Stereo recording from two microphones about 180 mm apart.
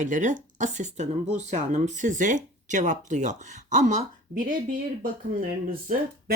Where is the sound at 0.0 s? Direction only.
45° right (ahead or behind).